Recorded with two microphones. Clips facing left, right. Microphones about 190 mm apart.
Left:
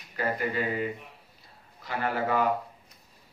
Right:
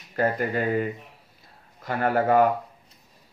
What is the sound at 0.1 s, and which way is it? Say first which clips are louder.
A man's voice: right 5 dB; 50° right (ahead or behind).